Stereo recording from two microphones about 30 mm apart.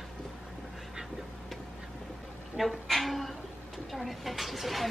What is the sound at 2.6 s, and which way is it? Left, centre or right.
Speech, centre.